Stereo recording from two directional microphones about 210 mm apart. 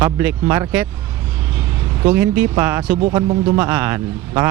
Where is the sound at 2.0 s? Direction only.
10° right (ahead or behind).